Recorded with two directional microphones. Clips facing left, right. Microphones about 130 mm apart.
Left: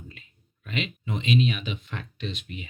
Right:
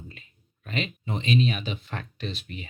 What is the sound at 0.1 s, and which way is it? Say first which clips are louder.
Speech: right 1 dB; 40° right (ahead or behind).